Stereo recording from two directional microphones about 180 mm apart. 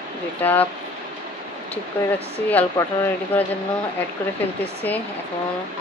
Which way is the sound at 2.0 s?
10° left (ahead or behind).